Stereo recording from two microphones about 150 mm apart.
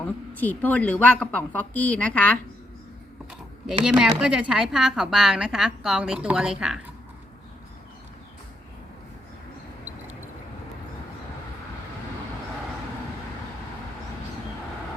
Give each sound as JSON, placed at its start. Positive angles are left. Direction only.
{"t": 0.0, "sound": "speech", "side_deg": 10}
{"t": 3.7, "sound": "speech", "side_deg": -5}